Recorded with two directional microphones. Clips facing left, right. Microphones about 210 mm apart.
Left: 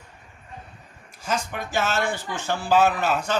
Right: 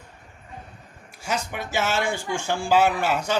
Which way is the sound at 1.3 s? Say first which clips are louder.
Left 1 dB; 10° right (ahead or behind).